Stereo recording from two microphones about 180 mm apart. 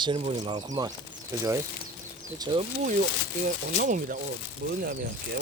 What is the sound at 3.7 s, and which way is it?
Speech, 50° right (ahead or behind).